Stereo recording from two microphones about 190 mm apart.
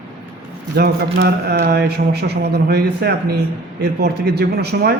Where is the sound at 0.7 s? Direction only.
55° right (ahead or behind).